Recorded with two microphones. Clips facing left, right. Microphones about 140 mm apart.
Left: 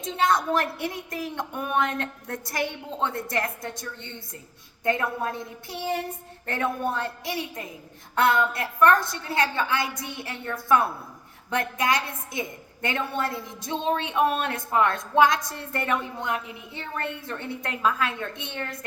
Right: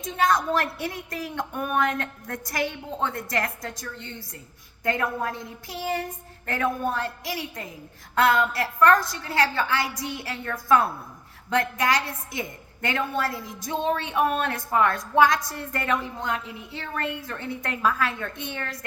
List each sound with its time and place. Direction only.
0.0 s a woman's voice: 25° left (ahead or behind)